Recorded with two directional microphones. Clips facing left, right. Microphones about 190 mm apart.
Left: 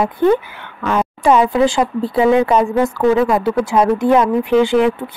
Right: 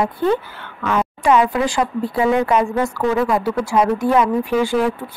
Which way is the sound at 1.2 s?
25° left (ahead or behind).